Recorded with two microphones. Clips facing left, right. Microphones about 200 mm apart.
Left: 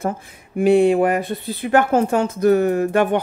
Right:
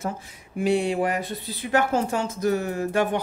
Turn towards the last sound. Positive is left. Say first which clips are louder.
# left 6 dB
turn(degrees=60)  # may be behind; listen again after turning